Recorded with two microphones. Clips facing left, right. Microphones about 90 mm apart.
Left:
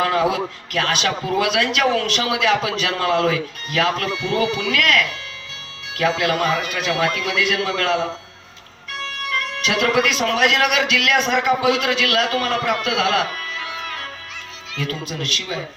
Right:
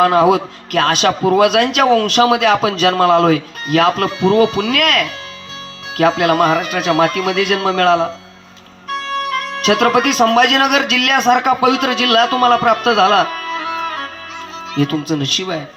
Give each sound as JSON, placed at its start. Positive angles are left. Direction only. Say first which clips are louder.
{"t": 0.0, "sound": "a man's voice", "louder": "right 8 dB", "side_deg": -45}